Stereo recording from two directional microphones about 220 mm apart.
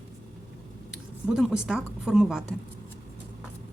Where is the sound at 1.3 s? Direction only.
Centre (ahead or behind).